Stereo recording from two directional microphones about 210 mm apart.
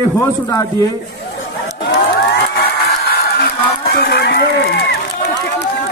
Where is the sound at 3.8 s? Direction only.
50° left (ahead or behind).